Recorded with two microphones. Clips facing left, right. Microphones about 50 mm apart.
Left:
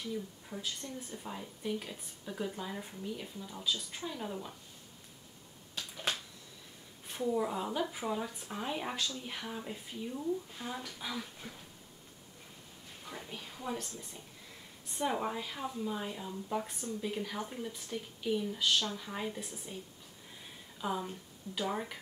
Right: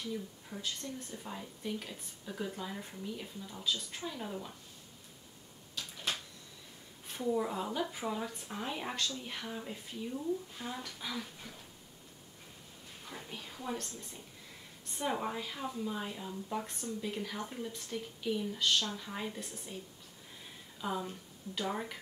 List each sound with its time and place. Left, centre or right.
0.5 s speech: centre
7.1 s speech: centre
11.4 s a sound: left
13.0 s speech: centre
20.8 s speech: centre